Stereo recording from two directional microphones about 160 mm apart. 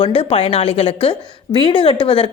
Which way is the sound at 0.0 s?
35° left (ahead or behind).